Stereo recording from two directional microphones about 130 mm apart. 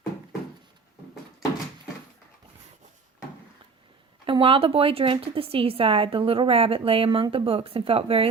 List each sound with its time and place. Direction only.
4.3 s a woman's voice: 45° right (ahead or behind)